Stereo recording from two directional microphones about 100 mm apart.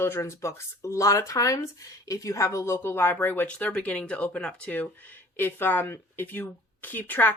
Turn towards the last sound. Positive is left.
turn(degrees=20)  # may be behind; listen again after turning